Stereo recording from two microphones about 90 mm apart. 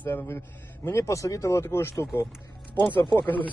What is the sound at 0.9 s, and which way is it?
Speech, 30° left (ahead or behind).